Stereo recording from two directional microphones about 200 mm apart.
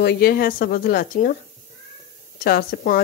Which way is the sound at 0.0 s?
50° left (ahead or behind).